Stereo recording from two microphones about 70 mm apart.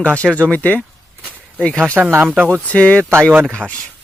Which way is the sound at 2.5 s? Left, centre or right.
Centre.